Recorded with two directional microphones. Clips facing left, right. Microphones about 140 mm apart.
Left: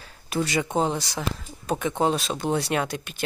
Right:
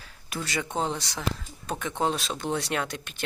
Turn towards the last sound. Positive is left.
turn(degrees=5)  # may be behind; listen again after turning